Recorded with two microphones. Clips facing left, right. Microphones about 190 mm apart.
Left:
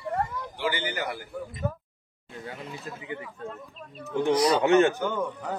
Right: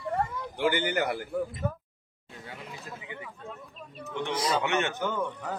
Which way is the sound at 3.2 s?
Centre (ahead or behind).